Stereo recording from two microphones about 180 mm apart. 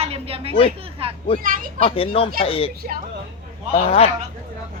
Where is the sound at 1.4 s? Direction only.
50° right (ahead or behind).